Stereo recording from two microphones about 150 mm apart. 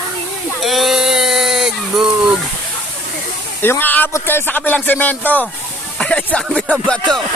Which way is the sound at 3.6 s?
15° left (ahead or behind).